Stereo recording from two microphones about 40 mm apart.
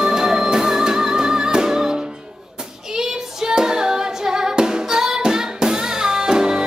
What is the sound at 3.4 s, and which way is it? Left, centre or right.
Music, centre.